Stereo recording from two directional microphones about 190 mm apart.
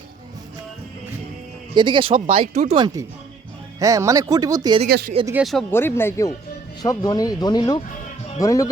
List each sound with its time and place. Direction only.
1.7 s speech: 25° right (ahead or behind)
2.7 s speech: 20° right (ahead or behind)
4.9 s speech: 55° right (ahead or behind)
5.2 s speech: 5° right (ahead or behind)
5.7 s speech: 10° left (ahead or behind)